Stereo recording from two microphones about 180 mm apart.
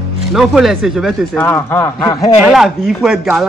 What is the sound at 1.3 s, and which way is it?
Speech, 10° left (ahead or behind).